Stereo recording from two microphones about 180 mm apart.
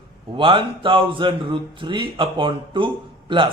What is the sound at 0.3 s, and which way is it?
Speech, 25° right (ahead or behind).